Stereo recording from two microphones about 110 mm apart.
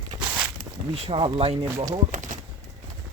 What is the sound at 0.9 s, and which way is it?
Speech, 60° right (ahead or behind).